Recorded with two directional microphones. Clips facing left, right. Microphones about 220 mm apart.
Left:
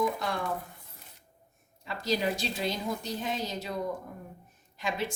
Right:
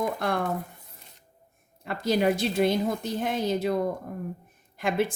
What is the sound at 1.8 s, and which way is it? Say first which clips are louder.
A woman's voice: right 6 dB; 55° right (ahead or behind).